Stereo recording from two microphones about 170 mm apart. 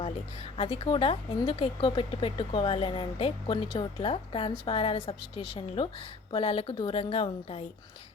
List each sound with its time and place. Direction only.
0.5 s speech: 35° left (ahead or behind)